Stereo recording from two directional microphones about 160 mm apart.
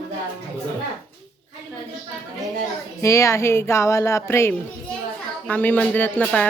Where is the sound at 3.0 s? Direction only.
20° left (ahead or behind).